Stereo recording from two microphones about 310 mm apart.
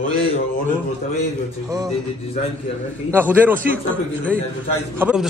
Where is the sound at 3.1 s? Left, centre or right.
Centre.